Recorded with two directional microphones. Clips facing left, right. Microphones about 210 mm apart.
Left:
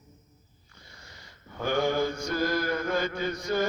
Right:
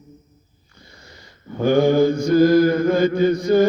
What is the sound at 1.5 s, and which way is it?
Mantra, 35° right (ahead or behind).